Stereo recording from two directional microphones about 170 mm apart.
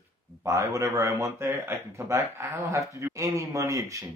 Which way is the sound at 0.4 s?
20° right (ahead or behind).